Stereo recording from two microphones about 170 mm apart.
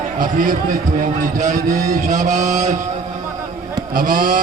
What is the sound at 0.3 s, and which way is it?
A man's voice, 50° right (ahead or behind).